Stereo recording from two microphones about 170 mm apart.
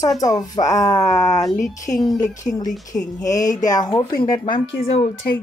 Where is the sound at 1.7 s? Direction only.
45° left (ahead or behind).